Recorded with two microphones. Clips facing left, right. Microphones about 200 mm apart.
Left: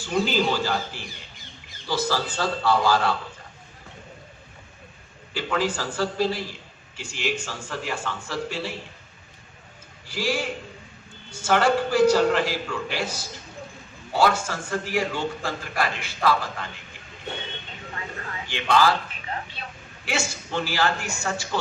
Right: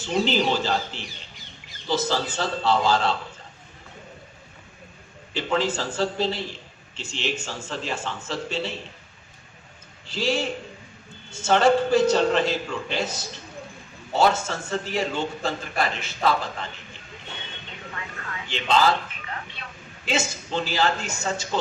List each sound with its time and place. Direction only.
0.0 s a man's voice: 20° right (ahead or behind)
5.3 s a man's voice: 25° right (ahead or behind)
10.1 s a man's voice: 25° right (ahead or behind)
17.9 s vehicle: 30° left (ahead or behind)
18.4 s a man's voice: 20° right (ahead or behind)
19.2 s a sound: 35° left (ahead or behind)
20.1 s a man's voice: 20° right (ahead or behind)